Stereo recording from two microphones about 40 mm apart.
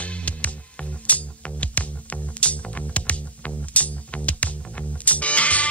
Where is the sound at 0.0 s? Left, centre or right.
Left.